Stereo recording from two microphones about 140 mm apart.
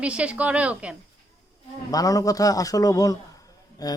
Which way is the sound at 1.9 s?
25° left (ahead or behind).